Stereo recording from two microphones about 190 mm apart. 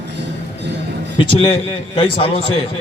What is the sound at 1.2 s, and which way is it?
Speech, 25° left (ahead or behind).